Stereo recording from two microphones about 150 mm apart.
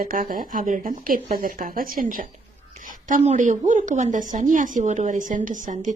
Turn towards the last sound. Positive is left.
turn(degrees=-55)  # may be behind; listen again after turning